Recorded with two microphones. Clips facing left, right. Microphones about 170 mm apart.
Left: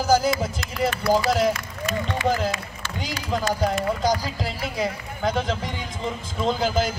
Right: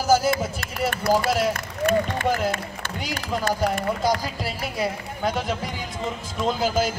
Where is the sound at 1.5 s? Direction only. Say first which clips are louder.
Right 5 dB; 55° right (ahead or behind).